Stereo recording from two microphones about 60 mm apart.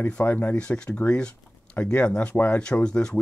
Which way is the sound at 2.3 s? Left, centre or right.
Left.